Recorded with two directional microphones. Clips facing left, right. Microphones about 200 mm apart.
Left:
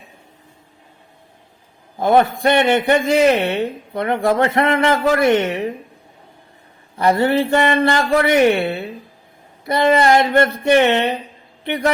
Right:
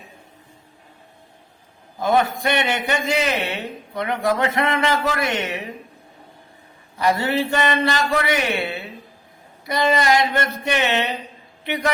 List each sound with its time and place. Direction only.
2.0 s a man's voice: 55° left (ahead or behind)
7.0 s a man's voice: 55° left (ahead or behind)